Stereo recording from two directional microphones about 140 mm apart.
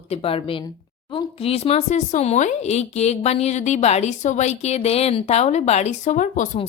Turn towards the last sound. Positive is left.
turn(degrees=65)  # may be behind; listen again after turning